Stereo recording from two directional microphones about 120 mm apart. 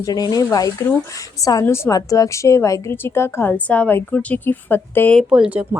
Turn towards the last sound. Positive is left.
turn(degrees=-10)  # may be behind; listen again after turning